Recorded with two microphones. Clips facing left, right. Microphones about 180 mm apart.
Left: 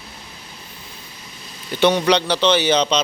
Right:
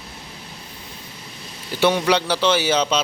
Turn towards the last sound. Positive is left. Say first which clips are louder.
# left 2 dB
turn(degrees=-5)  # may be behind; listen again after turning